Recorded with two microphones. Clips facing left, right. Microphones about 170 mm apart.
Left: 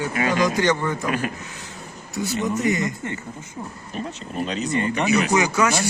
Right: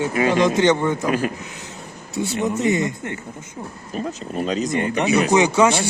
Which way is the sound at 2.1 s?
25° right (ahead or behind).